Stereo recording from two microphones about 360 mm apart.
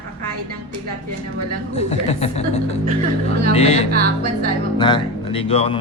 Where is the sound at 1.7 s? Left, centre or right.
Centre.